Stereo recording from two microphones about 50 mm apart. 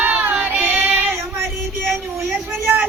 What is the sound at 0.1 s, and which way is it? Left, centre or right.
Child singing, right.